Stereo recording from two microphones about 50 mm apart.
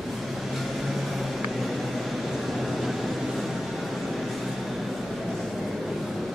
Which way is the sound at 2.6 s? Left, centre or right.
Centre.